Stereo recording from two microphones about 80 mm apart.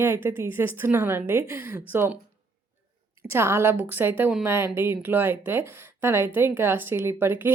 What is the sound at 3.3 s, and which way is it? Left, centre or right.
A woman's voice, right.